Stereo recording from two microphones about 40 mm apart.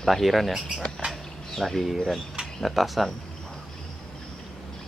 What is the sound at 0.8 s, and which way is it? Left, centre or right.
Speech, centre.